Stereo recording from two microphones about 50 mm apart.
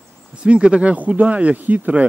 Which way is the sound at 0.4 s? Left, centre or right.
Right.